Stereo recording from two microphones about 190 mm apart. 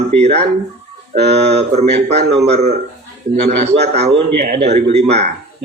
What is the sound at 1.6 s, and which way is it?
Speech, 35° right (ahead or behind).